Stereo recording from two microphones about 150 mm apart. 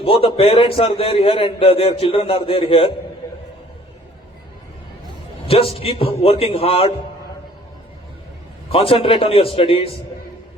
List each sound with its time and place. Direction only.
0.0 s a man's voice: 40° left (ahead or behind)
5.5 s a man's voice: 40° left (ahead or behind)
8.7 s a man's voice: 40° left (ahead or behind)